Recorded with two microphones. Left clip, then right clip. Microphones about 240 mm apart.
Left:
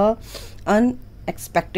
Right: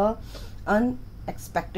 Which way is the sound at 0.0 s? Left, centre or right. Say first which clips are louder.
Left 6 dB; left.